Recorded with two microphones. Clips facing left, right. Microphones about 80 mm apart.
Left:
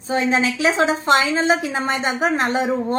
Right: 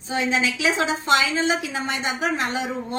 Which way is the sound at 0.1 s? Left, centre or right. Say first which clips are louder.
Left 4 dB; left.